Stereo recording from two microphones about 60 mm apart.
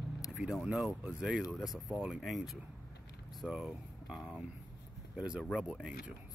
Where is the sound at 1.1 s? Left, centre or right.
Centre.